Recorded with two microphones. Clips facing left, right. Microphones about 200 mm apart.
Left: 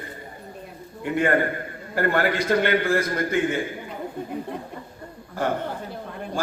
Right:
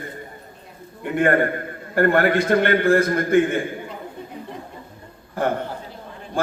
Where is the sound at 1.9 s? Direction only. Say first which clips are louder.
Right 5 dB; 55° right (ahead or behind).